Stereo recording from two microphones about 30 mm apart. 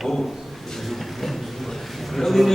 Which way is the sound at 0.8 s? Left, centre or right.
Centre.